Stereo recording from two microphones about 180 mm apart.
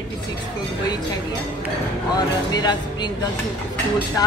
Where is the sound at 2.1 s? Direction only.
20° left (ahead or behind).